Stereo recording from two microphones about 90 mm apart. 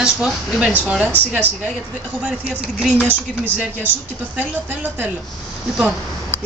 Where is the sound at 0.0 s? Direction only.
10° right (ahead or behind).